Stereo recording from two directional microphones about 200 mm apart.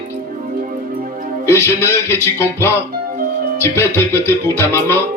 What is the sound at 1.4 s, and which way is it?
Music, 15° left (ahead or behind).